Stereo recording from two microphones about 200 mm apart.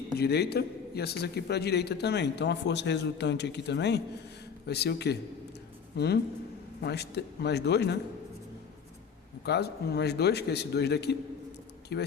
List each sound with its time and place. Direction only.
0.2 s a man's voice: 55° left (ahead or behind)
9.5 s a man's voice: 55° left (ahead or behind)